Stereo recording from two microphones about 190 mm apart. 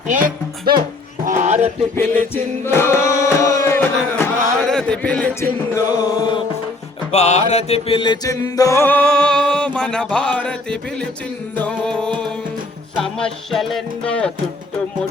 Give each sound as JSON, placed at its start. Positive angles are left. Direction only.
{"t": 1.2, "sound": "speech", "side_deg": -45}
{"t": 2.0, "sound": "music", "side_deg": 10}
{"t": 7.1, "sound": "chant", "side_deg": 35}
{"t": 11.5, "sound": "speech", "side_deg": 5}